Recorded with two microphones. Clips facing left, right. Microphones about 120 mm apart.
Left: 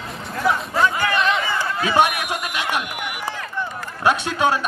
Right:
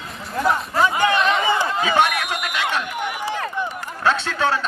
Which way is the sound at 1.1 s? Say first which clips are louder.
Right 1 dB; centre (ahead or behind).